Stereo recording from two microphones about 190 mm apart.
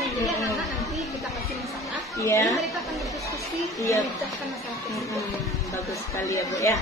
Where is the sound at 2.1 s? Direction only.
15° left (ahead or behind).